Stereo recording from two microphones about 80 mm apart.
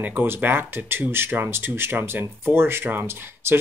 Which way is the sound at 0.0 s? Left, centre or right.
Right.